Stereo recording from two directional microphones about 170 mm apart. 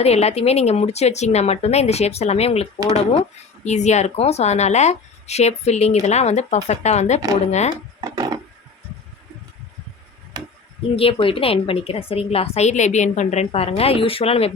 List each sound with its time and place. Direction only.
0.0 s speech: 40° left (ahead or behind)
8.0 s wood: 20° right (ahead or behind)
10.3 s tick: 25° right (ahead or behind)
10.9 s speech: 30° left (ahead or behind)